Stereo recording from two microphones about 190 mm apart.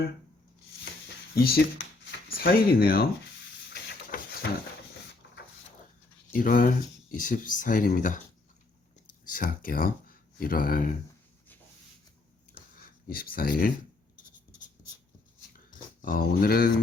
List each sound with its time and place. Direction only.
2.3 s speech: 50° left (ahead or behind)
3.7 s a sound: 60° left (ahead or behind)
6.3 s speech: 45° left (ahead or behind)
9.3 s speech: 45° left (ahead or behind)
13.1 s speech: 50° left (ahead or behind)
16.0 s speech: 45° left (ahead or behind)